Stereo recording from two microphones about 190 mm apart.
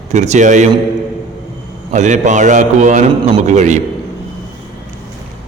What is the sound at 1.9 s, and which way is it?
A man's voice, 40° right (ahead or behind).